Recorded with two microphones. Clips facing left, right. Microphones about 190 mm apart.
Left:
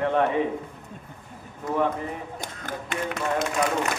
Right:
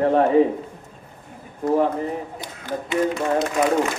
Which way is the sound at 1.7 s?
35° right (ahead or behind).